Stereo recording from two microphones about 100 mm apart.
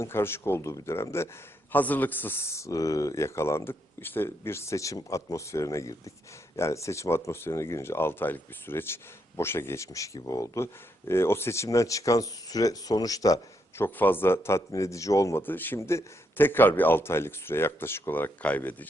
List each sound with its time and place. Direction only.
0.0 s speech: 25° left (ahead or behind)
13.7 s speech: 20° left (ahead or behind)